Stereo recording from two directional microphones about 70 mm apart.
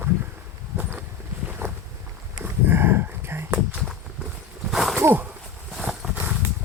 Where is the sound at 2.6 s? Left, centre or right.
Right.